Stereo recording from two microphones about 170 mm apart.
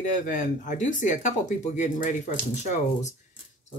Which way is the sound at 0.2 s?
50° left (ahead or behind).